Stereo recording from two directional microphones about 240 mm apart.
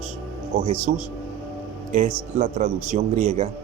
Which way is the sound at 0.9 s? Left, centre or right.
Right.